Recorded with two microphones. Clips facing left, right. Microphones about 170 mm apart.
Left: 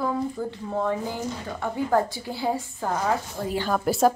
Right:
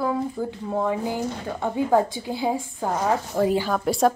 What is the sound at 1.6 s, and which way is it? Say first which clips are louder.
A woman's voice: right 3 dB; 15° right (ahead or behind).